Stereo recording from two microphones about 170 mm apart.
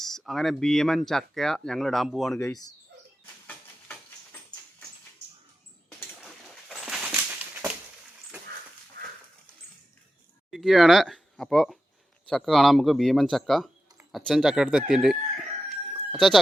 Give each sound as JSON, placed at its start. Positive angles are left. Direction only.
{"t": 0.0, "sound": "speech", "side_deg": 0}
{"t": 3.4, "sound": "stir", "side_deg": 10}
{"t": 6.2, "sound": "a sound", "side_deg": 0}
{"t": 9.0, "sound": "dog", "side_deg": -65}
{"t": 10.5, "sound": "speech", "side_deg": 0}